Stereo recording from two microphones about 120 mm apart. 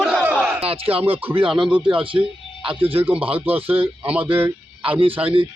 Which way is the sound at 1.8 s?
45° right (ahead or behind).